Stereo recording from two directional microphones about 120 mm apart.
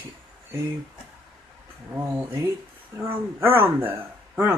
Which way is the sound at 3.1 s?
15° right (ahead or behind).